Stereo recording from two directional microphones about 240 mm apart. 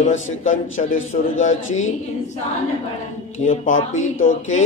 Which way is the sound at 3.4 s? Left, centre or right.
Left.